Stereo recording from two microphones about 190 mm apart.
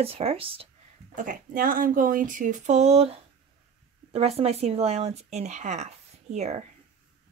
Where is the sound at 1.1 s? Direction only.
45° right (ahead or behind).